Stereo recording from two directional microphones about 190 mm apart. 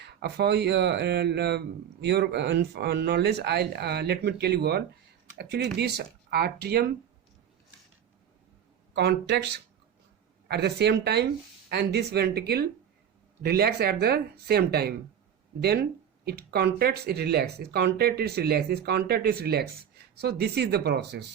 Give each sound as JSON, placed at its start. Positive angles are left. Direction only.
{"t": 0.0, "sound": "speech", "side_deg": -60}
{"t": 9.0, "sound": "speech", "side_deg": -60}
{"t": 10.5, "sound": "speech", "side_deg": -60}